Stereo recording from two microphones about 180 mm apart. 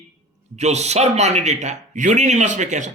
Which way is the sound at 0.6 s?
40° right (ahead or behind).